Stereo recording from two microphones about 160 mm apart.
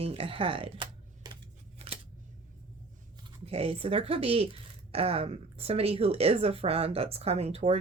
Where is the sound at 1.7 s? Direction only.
40° right (ahead or behind).